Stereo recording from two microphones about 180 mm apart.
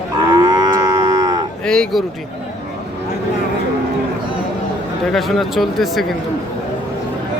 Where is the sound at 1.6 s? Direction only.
5° left (ahead or behind).